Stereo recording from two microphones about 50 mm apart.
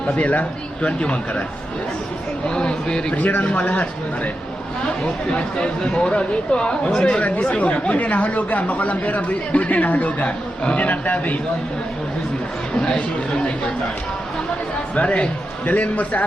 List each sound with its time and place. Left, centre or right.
0.1 s speech: left
2.5 s speech: centre
3.2 s speech: left
12.8 s speech: centre
14.9 s speech: left